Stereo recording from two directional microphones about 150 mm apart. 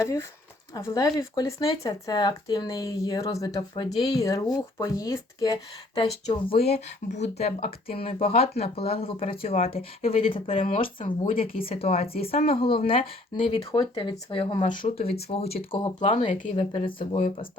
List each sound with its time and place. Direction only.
0.0 s speech: 20° left (ahead or behind)
6.7 s speech: 50° left (ahead or behind)
14.7 s speech: 60° left (ahead or behind)
15.3 s speech: 45° left (ahead or behind)
16.3 s speech: 50° left (ahead or behind)
17.2 s speech: 60° left (ahead or behind)